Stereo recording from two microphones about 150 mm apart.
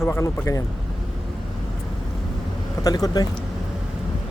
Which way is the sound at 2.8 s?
25° left (ahead or behind).